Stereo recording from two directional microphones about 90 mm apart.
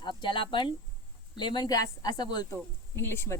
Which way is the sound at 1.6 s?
40° left (ahead or behind).